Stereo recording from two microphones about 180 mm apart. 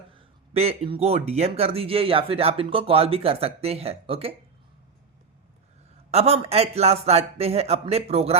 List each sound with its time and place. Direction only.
0.5 s speech: 35° right (ahead or behind)
6.1 s speech: 35° right (ahead or behind)